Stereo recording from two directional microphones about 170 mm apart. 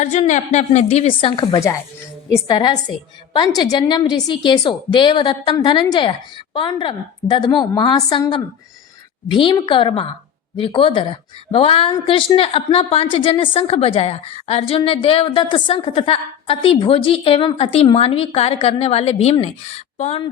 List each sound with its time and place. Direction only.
0.0 s a woman's voice: 45° left (ahead or behind)